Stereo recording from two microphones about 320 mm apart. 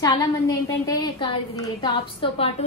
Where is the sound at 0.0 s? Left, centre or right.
Centre.